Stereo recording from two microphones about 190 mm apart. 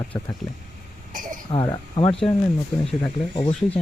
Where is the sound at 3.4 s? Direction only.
30° left (ahead or behind).